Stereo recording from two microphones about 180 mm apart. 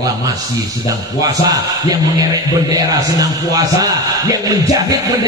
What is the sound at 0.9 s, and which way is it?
Speech, 20° right (ahead or behind).